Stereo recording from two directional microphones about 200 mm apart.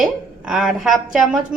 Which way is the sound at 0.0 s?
Centre (ahead or behind).